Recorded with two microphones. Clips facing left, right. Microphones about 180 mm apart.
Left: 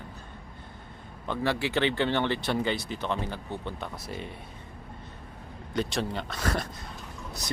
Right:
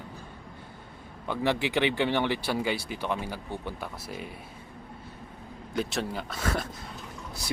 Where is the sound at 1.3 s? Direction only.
15° right (ahead or behind).